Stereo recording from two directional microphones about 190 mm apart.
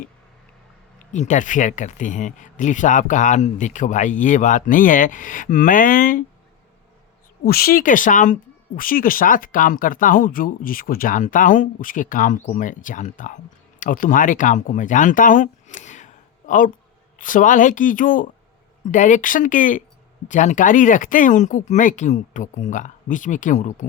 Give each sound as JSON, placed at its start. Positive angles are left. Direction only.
{"t": 1.1, "sound": "speech", "side_deg": 40}
{"t": 7.4, "sound": "speech", "side_deg": 50}